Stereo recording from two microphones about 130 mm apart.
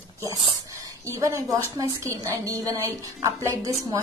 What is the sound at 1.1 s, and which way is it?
A woman's voice, 25° right (ahead or behind).